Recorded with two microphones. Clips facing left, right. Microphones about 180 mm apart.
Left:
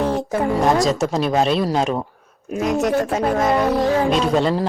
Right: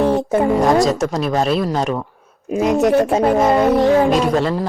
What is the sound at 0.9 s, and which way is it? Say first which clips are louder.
A child's voice: right 1 dB; centre (ahead or behind).